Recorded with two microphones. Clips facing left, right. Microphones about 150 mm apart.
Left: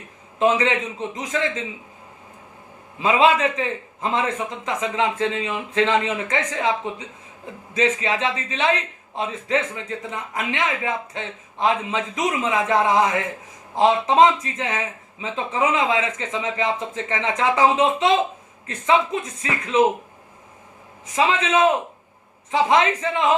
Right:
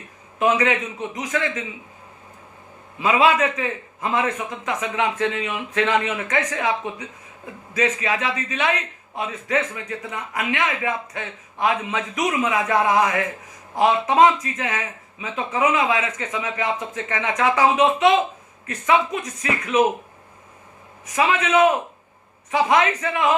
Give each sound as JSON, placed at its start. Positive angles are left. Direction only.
{"t": 0.3, "sound": "a man's voice", "side_deg": 25}
{"t": 3.0, "sound": "a man's voice", "side_deg": 25}
{"t": 21.2, "sound": "a man's voice", "side_deg": 25}